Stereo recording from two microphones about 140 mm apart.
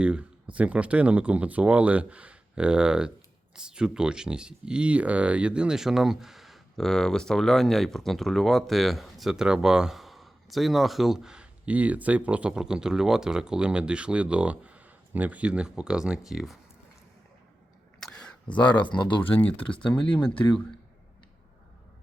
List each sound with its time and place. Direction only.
0.0 s speech: 10° right (ahead or behind)
18.0 s a sound: 5° left (ahead or behind)
18.9 s speech: 35° left (ahead or behind)
19.3 s speech: 10° left (ahead or behind)